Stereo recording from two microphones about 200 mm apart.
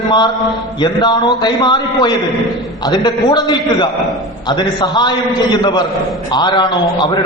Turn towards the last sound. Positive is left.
turn(degrees=20)  # may be behind; listen again after turning